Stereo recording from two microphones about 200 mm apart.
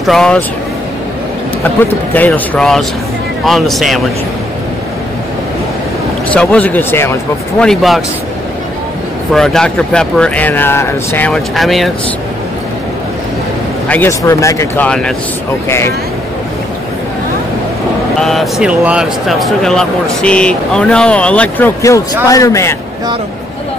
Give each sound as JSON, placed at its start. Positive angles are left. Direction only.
{"t": 0.0, "sound": "speech", "side_deg": 0}
{"t": 1.6, "sound": "speech", "side_deg": 10}
{"t": 6.3, "sound": "speech", "side_deg": 5}
{"t": 9.3, "sound": "speech", "side_deg": 0}
{"t": 13.8, "sound": "speech", "side_deg": 10}
{"t": 14.9, "sound": "speech", "side_deg": 5}
{"t": 18.2, "sound": "speech", "side_deg": 0}